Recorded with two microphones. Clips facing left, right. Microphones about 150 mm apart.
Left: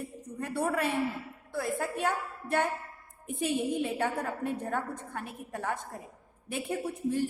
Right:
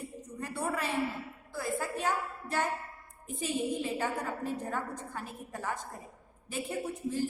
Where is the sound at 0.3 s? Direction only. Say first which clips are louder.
Left 4 dB; 60° left (ahead or behind).